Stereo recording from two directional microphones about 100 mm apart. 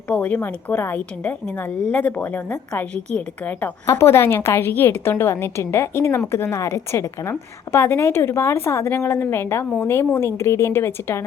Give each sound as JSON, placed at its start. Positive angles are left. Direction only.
{"t": 0.1, "sound": "a woman's voice", "side_deg": 15}
{"t": 3.8, "sound": "a woman's voice", "side_deg": 25}